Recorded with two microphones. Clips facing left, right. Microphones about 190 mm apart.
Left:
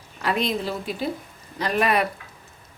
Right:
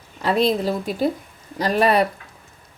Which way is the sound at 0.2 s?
30° right (ahead or behind).